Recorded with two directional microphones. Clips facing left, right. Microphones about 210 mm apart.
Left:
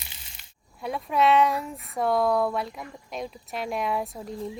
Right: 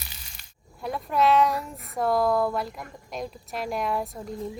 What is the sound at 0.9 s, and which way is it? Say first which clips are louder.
Speech: even; centre (ahead or behind).